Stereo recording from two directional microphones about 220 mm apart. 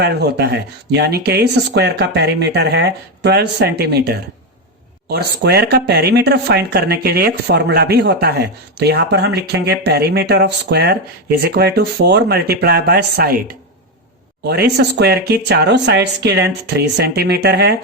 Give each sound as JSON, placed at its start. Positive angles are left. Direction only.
{"t": 0.0, "sound": "speech", "side_deg": -50}
{"t": 14.4, "sound": "speech", "side_deg": -45}